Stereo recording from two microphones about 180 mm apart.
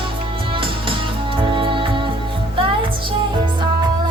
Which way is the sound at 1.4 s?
25° right (ahead or behind).